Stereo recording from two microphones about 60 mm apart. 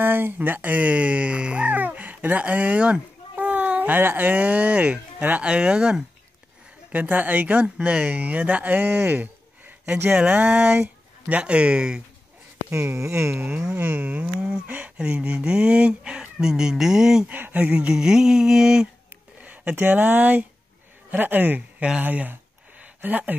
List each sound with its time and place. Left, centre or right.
0.0 s speech: right; by 5.9 s centre
6.9 s speech: right
10.3 s speech: right
12.7 s speech: right
13.5 s speech: centre
13.7 s speech: right; by 17.3 s centre
17.3 s speech: right
17.8 s speech: centre
19.4 s speech: right
22.0 s a sound: right